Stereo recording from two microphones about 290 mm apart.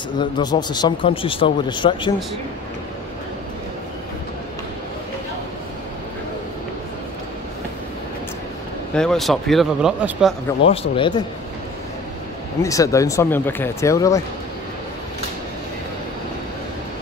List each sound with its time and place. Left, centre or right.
0.2 s speech: centre
8.9 s speech: centre
10.6 s speech: centre
12.6 s speech: centre